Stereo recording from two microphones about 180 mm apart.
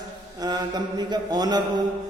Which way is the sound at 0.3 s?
20° right (ahead or behind).